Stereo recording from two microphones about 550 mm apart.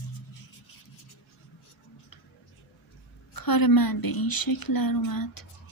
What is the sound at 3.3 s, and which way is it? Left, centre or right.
A woman's voice, left.